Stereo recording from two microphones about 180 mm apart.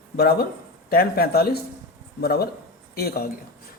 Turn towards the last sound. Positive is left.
turn(degrees=60)  # may be behind; listen again after turning